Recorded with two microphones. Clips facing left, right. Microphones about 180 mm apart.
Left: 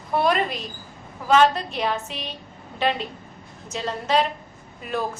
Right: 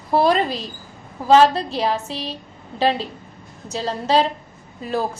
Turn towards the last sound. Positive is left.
turn(degrees=-30)  # may be behind; listen again after turning